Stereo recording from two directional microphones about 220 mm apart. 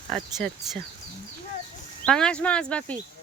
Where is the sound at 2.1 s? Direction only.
5° left (ahead or behind).